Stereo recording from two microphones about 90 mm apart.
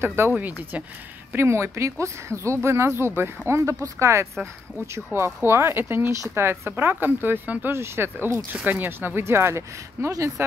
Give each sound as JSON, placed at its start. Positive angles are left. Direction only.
{"t": 0.0, "sound": "speech", "side_deg": -30}
{"t": 1.3, "sound": "speech", "side_deg": -30}